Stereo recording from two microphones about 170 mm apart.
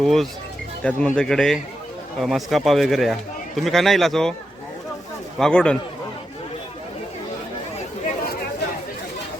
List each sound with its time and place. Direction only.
0.0 s speech: centre (ahead or behind)
5.4 s speech: 5° left (ahead or behind)